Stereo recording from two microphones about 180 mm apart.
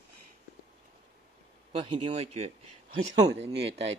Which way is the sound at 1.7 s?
30° right (ahead or behind).